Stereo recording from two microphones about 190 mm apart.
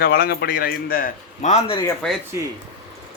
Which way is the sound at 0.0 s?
55° left (ahead or behind).